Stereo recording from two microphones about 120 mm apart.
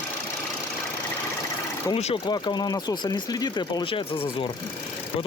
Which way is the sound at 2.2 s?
35° left (ahead or behind).